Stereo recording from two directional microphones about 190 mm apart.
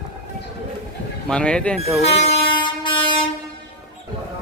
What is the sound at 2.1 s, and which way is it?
Train, 35° left (ahead or behind).